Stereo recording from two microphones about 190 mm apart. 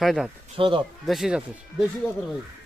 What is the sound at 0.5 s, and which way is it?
Speech, 25° right (ahead or behind).